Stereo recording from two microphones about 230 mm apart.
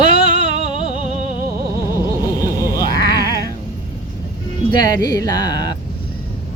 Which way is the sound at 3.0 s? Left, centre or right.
Right.